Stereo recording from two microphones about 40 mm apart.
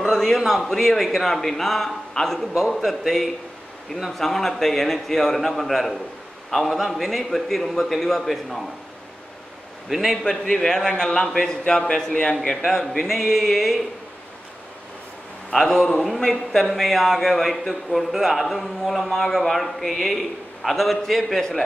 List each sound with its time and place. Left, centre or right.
0.1 s a sound: centre
0.5 s a man's voice: centre
4.1 s a man's voice: centre
9.8 s a man's voice: centre
10.2 s a man's voice: centre
12.6 s a man's voice: centre
15.5 s a man's voice: centre